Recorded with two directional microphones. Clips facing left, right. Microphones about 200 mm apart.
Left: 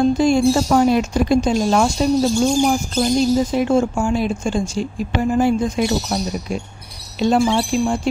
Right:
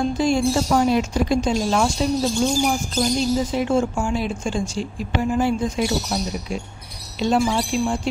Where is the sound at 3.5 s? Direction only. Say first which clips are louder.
Left 3 dB; 45° left (ahead or behind).